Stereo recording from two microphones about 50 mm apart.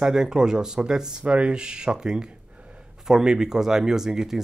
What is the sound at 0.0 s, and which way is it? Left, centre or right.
Speech, centre.